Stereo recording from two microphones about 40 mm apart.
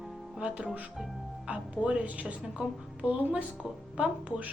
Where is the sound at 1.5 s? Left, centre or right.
Right.